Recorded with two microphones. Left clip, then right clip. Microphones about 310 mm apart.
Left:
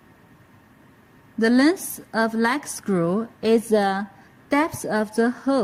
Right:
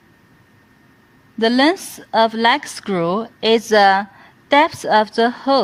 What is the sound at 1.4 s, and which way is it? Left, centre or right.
A woman's voice, centre.